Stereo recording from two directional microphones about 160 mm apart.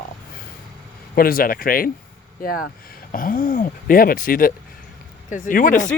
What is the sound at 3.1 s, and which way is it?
Speech, 60° left (ahead or behind).